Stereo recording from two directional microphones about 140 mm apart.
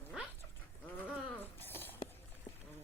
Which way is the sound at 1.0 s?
15° left (ahead or behind).